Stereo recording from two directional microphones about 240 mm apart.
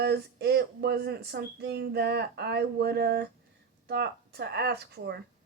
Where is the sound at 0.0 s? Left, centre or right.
Right.